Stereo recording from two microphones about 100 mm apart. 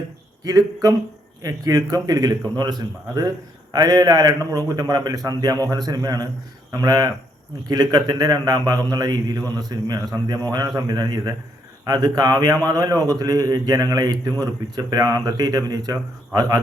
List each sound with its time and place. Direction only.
0.4 s a man's voice: 35° right (ahead or behind)